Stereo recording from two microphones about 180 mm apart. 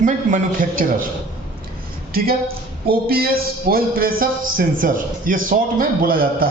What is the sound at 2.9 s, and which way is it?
A man's voice, 60° right (ahead or behind).